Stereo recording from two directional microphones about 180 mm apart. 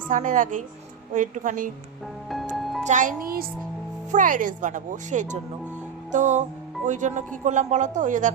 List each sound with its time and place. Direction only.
0.1 s speech: 45° right (ahead or behind)
2.3 s music: centre (ahead or behind)
2.8 s speech: 45° right (ahead or behind)
6.1 s music: 40° right (ahead or behind)
6.8 s speech: 45° right (ahead or behind)